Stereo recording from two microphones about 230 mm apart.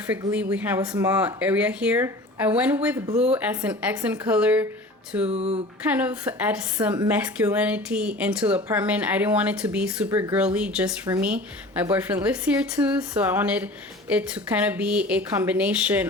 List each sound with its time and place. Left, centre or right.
0.1 s speech: centre
5.3 s speech: right
5.9 s speech: centre